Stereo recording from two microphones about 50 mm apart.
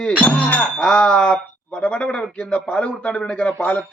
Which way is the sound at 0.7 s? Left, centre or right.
Centre.